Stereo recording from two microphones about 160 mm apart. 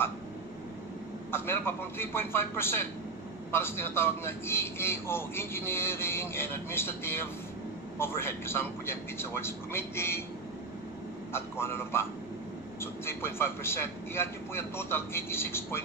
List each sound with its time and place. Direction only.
1.3 s a man's voice: 15° left (ahead or behind)
11.3 s a man's voice: 15° left (ahead or behind)